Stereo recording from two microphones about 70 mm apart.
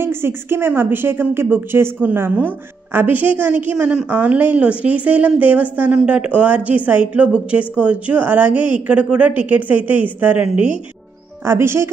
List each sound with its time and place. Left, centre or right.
0.0 s a woman's voice: right
11.4 s speech: right